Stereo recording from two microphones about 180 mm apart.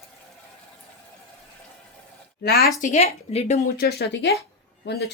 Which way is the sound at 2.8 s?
40° left (ahead or behind).